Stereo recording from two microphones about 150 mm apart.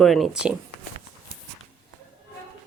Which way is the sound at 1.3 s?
65° right (ahead or behind).